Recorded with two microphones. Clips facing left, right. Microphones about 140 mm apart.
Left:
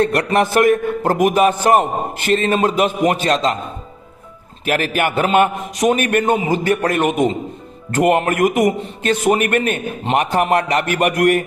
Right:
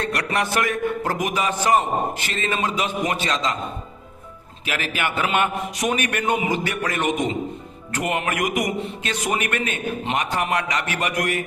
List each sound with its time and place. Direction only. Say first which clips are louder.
0.0 s a man's voice: left 8 dB; 50° left (ahead or behind)
4.6 s a man's voice: left 8 dB; 50° left (ahead or behind)